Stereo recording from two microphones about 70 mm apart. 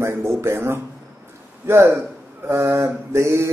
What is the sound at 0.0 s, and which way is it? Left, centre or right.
A man's voice, right.